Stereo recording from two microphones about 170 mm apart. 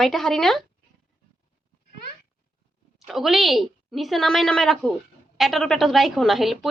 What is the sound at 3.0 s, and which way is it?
A woman's voice, centre (ahead or behind).